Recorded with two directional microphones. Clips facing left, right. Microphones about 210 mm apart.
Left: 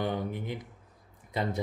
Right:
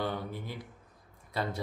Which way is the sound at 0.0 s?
15° left (ahead or behind).